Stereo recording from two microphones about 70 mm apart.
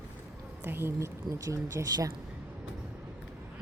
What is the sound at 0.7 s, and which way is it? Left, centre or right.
Speech, right.